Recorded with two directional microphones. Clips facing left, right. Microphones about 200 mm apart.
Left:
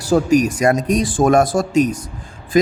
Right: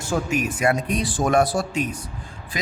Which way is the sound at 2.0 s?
45° left (ahead or behind).